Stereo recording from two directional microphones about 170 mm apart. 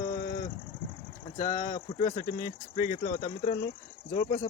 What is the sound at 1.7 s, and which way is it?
Speech, 40° left (ahead or behind).